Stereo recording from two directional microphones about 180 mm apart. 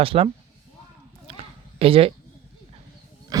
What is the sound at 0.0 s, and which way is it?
Speech, 30° right (ahead or behind).